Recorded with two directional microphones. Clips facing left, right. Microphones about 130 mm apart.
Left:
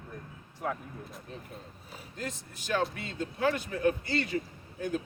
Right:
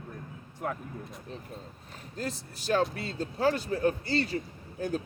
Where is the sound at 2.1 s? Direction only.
35° right (ahead or behind).